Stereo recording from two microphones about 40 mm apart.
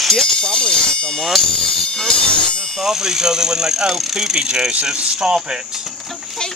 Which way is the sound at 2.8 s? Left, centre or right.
Centre.